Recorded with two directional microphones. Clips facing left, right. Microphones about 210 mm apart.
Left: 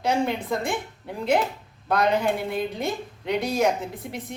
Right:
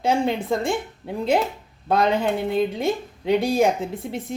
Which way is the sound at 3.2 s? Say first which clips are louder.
Right 4 dB; 30° right (ahead or behind).